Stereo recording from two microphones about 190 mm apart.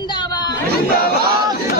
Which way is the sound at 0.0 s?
25° left (ahead or behind).